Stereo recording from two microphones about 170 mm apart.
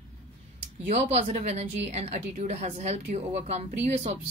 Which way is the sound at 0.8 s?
40° right (ahead or behind).